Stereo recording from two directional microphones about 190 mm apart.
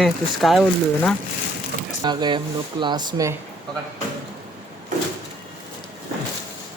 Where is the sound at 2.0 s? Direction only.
20° right (ahead or behind).